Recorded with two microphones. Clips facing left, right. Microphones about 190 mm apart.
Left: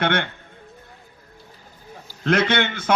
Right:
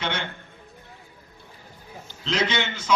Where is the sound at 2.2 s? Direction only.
55° left (ahead or behind).